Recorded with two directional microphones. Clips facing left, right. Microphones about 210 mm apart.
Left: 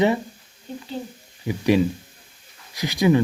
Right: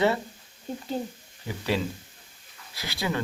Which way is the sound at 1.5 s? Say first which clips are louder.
Left 9 dB; 15° left (ahead or behind).